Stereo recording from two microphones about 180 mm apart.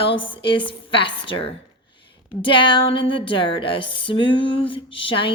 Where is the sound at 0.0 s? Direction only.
30° left (ahead or behind).